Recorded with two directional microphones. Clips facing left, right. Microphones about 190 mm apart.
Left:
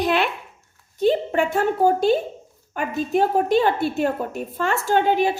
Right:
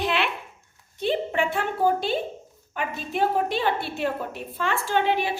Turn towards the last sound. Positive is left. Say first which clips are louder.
# left 5 dB
turn(degrees=45)  # may be behind; listen again after turning